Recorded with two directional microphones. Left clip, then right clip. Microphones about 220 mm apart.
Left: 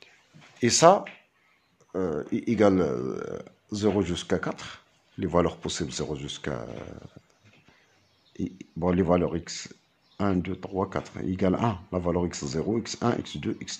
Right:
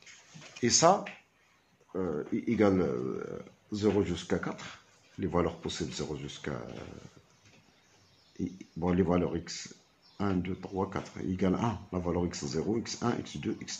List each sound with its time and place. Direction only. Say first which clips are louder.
0.6 s speech: left 6 dB; 45° left (ahead or behind)
8.4 s speech: left 4 dB; 50° left (ahead or behind)